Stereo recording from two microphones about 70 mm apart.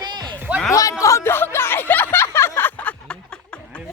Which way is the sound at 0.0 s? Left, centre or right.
Right.